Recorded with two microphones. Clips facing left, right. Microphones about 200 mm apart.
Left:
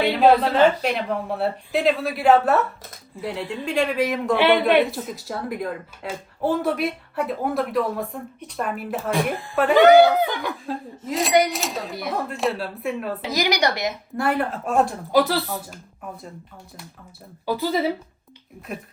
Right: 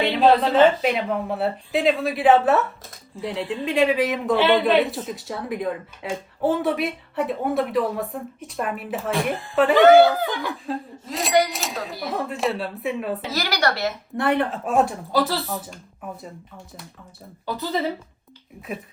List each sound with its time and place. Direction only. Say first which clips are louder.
0.0 s a woman's voice: left 1 dB; centre (ahead or behind)
13.3 s a woman's voice: left 4 dB; 15° left (ahead or behind)
14.2 s a woman's voice: right 2 dB; centre (ahead or behind)
17.4 s a woman's voice: left 3 dB; 10° left (ahead or behind)